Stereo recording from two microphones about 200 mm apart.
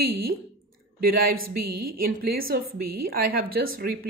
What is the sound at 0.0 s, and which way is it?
Speech, 50° right (ahead or behind).